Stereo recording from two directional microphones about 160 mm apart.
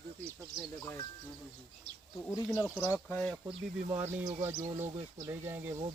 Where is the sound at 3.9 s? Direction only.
15° right (ahead or behind).